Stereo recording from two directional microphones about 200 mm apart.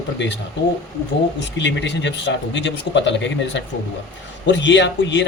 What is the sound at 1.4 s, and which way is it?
Speech, 65° left (ahead or behind).